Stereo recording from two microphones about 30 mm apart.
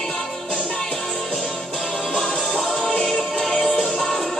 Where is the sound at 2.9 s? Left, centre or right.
Centre.